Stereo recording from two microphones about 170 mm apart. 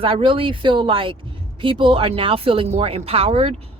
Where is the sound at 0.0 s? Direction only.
30° right (ahead or behind).